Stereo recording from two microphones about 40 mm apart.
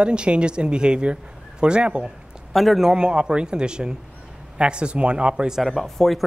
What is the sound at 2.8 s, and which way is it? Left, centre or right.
Speech, centre.